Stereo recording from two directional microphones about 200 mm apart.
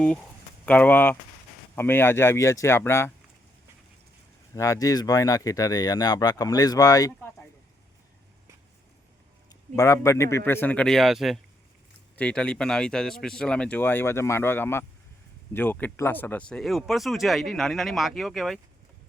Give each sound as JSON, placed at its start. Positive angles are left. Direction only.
{"t": 0.0, "sound": "speech", "side_deg": 5}
{"t": 4.5, "sound": "speech", "side_deg": 15}
{"t": 9.7, "sound": "speech", "side_deg": 15}